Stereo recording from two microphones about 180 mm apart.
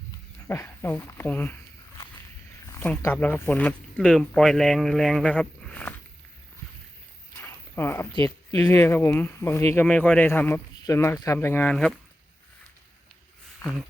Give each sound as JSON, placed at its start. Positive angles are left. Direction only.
{"t": 0.4, "sound": "speech", "side_deg": 15}
{"t": 2.8, "sound": "speech", "side_deg": 10}
{"t": 7.3, "sound": "a sound", "side_deg": 15}
{"t": 8.1, "sound": "speech", "side_deg": 20}
{"t": 13.6, "sound": "speech", "side_deg": 20}